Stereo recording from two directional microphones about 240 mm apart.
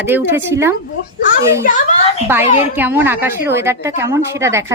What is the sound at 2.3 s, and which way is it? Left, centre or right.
A woman's voice, centre.